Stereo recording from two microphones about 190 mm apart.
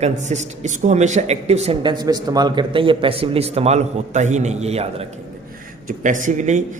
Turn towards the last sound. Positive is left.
turn(degrees=-40)  # may be behind; listen again after turning